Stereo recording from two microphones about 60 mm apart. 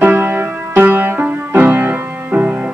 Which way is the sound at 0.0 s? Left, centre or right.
Right.